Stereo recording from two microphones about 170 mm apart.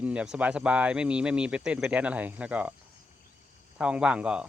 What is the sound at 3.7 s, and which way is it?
Speech, 5° right (ahead or behind).